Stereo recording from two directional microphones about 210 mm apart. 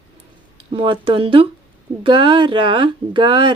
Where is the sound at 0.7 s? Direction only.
25° right (ahead or behind).